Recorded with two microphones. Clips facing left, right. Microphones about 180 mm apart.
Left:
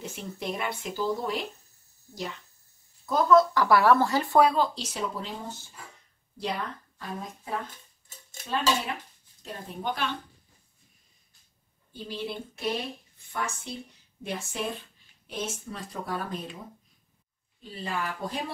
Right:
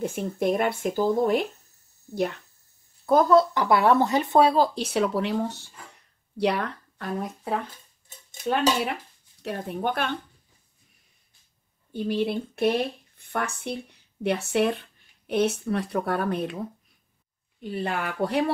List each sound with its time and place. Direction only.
0.0 s speech: 50° right (ahead or behind)
3.5 s speech: 20° right (ahead or behind)
4.7 s a woman's voice: 65° right (ahead or behind)
11.9 s a woman's voice: 60° right (ahead or behind)
17.6 s speech: 60° right (ahead or behind)